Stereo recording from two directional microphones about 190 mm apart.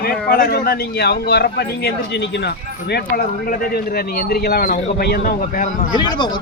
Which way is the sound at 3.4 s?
50° left (ahead or behind).